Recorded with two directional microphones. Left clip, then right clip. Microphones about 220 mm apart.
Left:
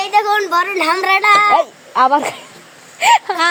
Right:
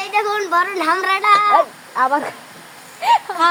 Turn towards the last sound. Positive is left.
turn(degrees=35)  # may be behind; listen again after turning